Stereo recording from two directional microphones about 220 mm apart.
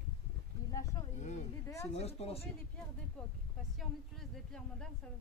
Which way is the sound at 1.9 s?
30° left (ahead or behind).